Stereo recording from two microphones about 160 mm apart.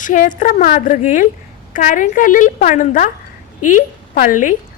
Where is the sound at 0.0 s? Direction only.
55° left (ahead or behind).